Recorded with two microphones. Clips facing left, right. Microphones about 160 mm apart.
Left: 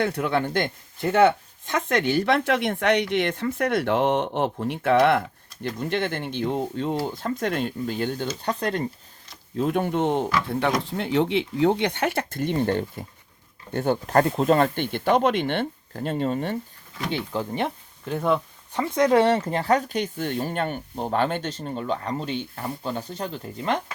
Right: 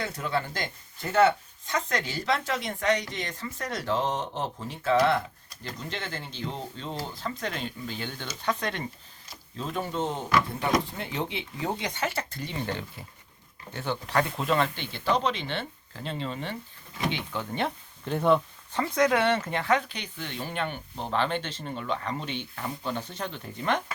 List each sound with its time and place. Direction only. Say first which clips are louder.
0.0 s speech: left 7 dB; 65° left (ahead or behind); by 8.3 s 50° left (ahead or behind)
8.3 s speech: left 4 dB; 35° left (ahead or behind)
9.6 s speech: left 8 dB; 60° left (ahead or behind)
17.1 s speech: left 7 dB; 35° left (ahead or behind)
18.0 s speech: even; centre (ahead or behind)
18.7 s speech: left 3 dB; 15° left (ahead or behind)
19.0 s speech: left 7 dB; 30° left (ahead or behind)